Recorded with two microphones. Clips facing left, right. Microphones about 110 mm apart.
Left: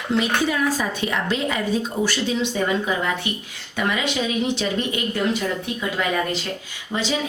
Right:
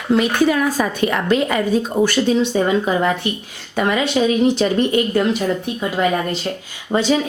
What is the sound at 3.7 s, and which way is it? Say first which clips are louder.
A woman's voice: right 6 dB; 40° right (ahead or behind).